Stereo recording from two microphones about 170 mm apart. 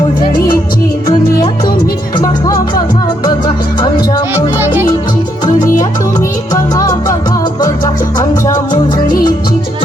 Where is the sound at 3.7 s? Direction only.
25° left (ahead or behind).